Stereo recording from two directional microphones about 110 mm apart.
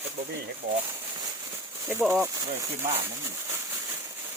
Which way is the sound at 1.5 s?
20° right (ahead or behind).